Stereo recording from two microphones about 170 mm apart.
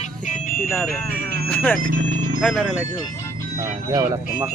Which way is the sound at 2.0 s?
90° right.